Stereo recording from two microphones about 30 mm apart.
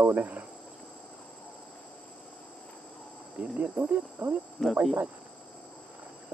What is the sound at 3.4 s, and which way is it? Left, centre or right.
Speech, right.